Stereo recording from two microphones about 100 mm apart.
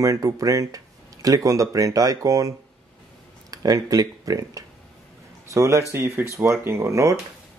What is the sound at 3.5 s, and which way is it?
A man's voice, 40° right (ahead or behind).